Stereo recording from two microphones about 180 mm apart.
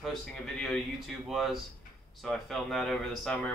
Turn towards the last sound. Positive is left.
turn(degrees=0)  # may be behind; listen again after turning